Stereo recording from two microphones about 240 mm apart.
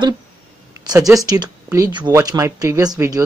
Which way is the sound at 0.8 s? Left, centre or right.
Centre.